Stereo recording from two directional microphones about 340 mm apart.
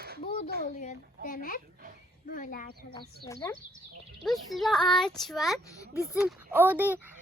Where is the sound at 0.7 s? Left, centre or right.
Left.